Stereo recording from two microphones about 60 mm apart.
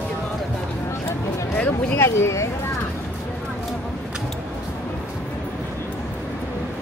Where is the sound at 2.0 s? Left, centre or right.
Left.